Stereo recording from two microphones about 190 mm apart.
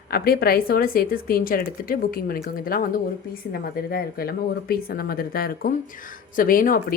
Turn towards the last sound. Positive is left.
turn(degrees=50)  # may be behind; listen again after turning